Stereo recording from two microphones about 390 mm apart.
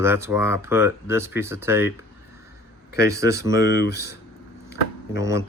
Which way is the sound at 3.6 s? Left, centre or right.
Left.